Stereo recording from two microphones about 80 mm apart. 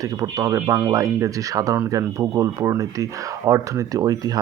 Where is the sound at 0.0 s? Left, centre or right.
Right.